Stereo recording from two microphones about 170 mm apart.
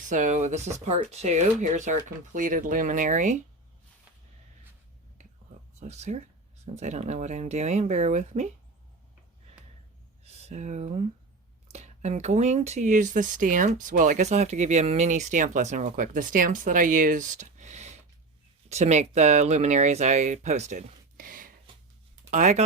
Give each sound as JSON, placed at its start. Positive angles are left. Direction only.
{"t": 0.1, "sound": "speech", "side_deg": -45}
{"t": 5.8, "sound": "speech", "side_deg": -40}
{"t": 10.2, "sound": "speech", "side_deg": -40}